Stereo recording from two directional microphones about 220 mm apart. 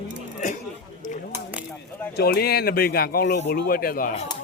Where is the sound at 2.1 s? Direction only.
45° left (ahead or behind).